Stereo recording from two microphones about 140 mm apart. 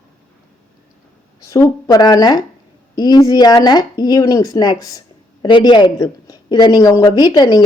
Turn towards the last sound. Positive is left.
turn(degrees=30)  # may be behind; listen again after turning